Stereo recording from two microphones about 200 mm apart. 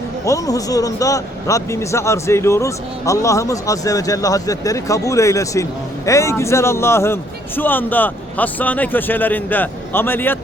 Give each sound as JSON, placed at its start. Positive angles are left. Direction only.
{"t": 0.3, "sound": "speech", "side_deg": 15}